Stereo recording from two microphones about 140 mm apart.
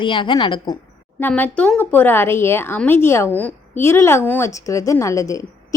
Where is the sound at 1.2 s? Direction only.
15° left (ahead or behind).